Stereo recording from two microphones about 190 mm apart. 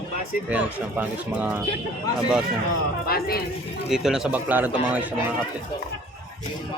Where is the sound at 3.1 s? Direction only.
55° left (ahead or behind).